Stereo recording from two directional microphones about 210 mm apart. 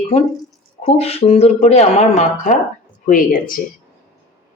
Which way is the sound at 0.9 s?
30° left (ahead or behind).